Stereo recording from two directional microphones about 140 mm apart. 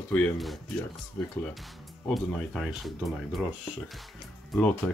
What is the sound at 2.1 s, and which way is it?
Speech, centre (ahead or behind).